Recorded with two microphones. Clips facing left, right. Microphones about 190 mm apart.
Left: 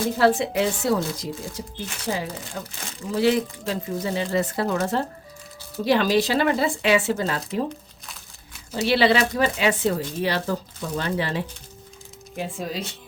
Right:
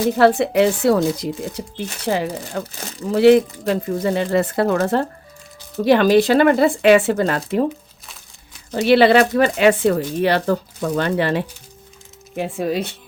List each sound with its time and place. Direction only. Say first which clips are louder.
0.2 s speech: right 5 dB; 60° right (ahead or behind)
8.9 s speech: right 7 dB; 55° right (ahead or behind)